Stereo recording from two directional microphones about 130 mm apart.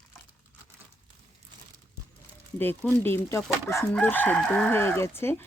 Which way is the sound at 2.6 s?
15° left (ahead or behind).